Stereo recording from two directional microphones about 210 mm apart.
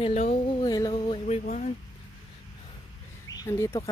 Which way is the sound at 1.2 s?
35° left (ahead or behind).